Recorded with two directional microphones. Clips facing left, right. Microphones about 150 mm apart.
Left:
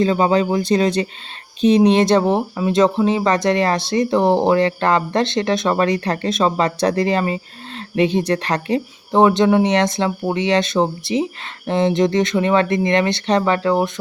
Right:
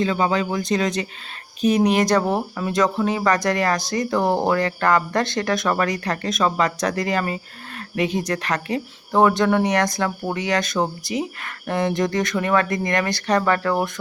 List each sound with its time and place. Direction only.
0.0 s speech: 30° left (ahead or behind)